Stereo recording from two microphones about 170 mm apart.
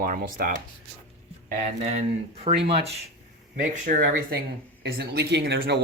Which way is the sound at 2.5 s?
35° right (ahead or behind).